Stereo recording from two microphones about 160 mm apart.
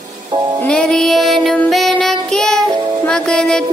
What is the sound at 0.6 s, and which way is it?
Music, 5° left (ahead or behind).